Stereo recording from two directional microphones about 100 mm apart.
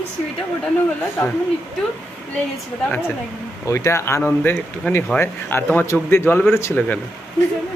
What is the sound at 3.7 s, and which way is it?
A man's voice, 25° left (ahead or behind).